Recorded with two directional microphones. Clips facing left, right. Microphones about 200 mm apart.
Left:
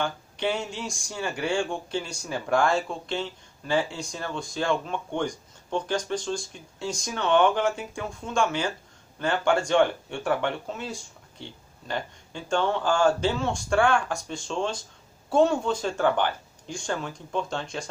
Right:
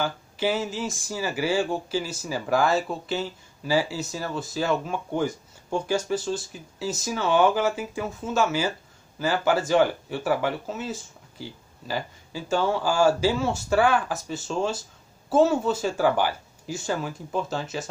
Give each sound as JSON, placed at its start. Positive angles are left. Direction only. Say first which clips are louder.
{"t": 0.0, "sound": "speech", "louder": "right 2 dB", "side_deg": -5}